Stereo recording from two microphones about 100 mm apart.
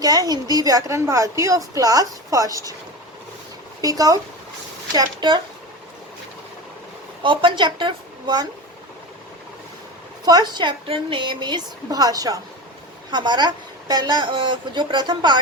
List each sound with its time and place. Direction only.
0.0 s speech: 40° right (ahead or behind)
3.8 s speech: 40° right (ahead or behind)
4.9 s a woman's voice: 50° right (ahead or behind)
7.2 s a woman's voice: 55° right (ahead or behind)
10.2 s a woman's voice: 45° right (ahead or behind)
10.8 s a woman's voice: 60° right (ahead or behind); by 12.4 s 35° right (ahead or behind)
13.1 s a woman's voice: 50° right (ahead or behind)